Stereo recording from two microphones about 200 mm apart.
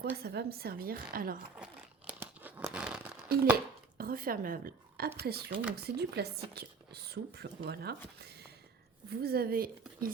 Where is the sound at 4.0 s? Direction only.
45° right (ahead or behind).